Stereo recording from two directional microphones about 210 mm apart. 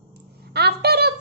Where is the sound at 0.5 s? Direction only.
50° right (ahead or behind).